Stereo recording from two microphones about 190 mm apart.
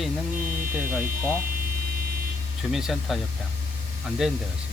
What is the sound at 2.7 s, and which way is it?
Speech, centre (ahead or behind).